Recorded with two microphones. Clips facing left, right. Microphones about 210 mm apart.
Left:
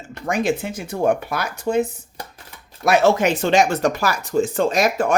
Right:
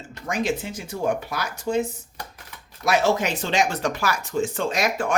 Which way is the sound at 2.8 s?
60° left (ahead or behind).